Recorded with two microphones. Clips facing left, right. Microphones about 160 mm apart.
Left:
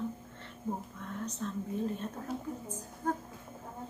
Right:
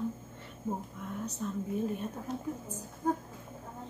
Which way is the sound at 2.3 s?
5° left (ahead or behind).